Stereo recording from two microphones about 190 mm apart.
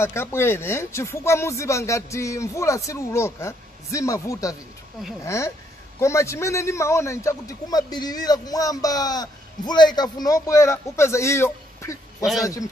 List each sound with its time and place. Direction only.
0.0 s a man's voice: 15° left (ahead or behind)